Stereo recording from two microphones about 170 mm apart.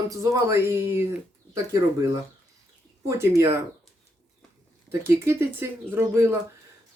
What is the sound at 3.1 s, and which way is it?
Speech, 15° right (ahead or behind).